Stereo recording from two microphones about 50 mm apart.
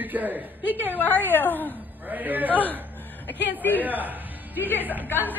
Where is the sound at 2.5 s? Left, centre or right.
Left.